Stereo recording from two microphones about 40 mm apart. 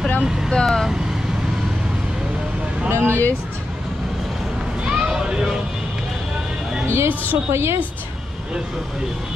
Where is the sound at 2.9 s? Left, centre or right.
Right.